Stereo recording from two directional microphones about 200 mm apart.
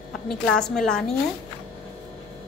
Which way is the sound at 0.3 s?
5° left (ahead or behind).